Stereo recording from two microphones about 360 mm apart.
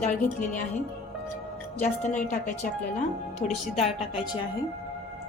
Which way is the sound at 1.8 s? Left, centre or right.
Centre.